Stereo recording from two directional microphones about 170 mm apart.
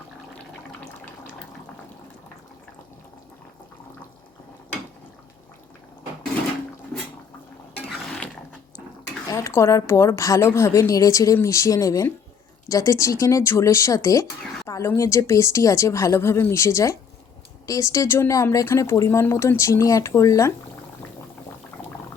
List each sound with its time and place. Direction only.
9.3 s speech: 15° left (ahead or behind)